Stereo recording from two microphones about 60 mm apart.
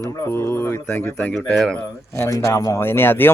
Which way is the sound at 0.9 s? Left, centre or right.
Left.